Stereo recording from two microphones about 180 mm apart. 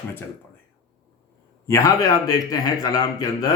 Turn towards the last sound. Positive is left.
turn(degrees=20)  # may be behind; listen again after turning